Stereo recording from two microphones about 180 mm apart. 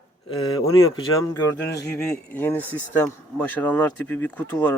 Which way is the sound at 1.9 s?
15° left (ahead or behind).